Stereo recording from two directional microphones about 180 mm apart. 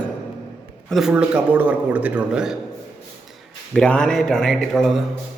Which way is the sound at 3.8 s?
5° left (ahead or behind).